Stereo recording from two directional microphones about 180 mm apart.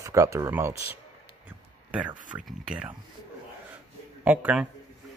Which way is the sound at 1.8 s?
10° right (ahead or behind).